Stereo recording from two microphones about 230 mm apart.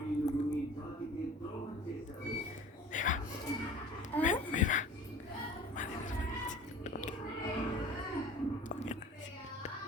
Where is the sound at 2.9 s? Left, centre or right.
Left.